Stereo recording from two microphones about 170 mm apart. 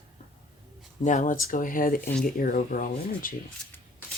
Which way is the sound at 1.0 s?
45° left (ahead or behind).